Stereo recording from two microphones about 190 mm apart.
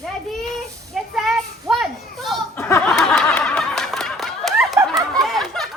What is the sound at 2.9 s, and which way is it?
Snicker, centre (ahead or behind).